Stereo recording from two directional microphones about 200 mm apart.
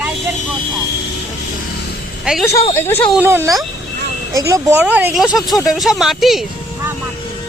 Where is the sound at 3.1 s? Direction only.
10° right (ahead or behind).